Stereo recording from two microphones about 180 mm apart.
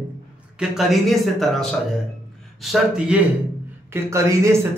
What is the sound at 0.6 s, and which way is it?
Speech, centre (ahead or behind).